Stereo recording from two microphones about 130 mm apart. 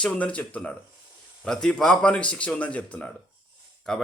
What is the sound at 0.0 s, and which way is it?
A man's voice, 10° left (ahead or behind).